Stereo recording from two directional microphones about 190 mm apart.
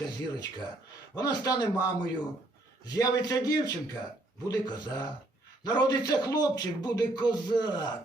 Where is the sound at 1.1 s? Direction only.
20° left (ahead or behind).